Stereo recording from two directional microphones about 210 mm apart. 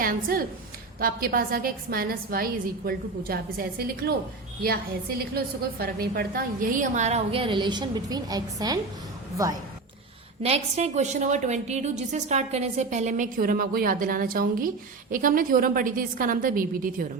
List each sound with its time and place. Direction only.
0.0 s a woman's voice: 45° right (ahead or behind)
5.8 s a woman's voice: 45° right (ahead or behind); by 8.8 s 20° right (ahead or behind)
10.4 s a woman's voice: 30° right (ahead or behind)